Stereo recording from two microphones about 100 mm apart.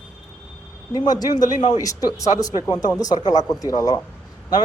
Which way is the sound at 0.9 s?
40° left (ahead or behind).